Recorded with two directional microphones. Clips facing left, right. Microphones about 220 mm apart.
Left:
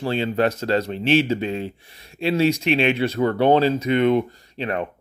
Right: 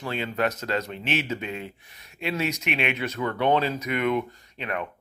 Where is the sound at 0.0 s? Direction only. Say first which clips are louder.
Left 6 dB; 30° left (ahead or behind).